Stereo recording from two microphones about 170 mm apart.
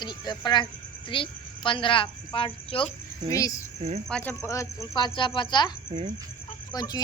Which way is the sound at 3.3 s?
20° left (ahead or behind).